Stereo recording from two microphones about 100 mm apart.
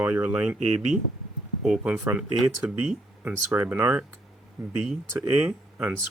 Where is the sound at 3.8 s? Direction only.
20° right (ahead or behind).